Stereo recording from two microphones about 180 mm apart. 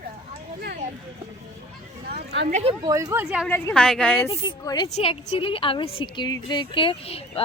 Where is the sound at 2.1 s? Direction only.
60° right (ahead or behind).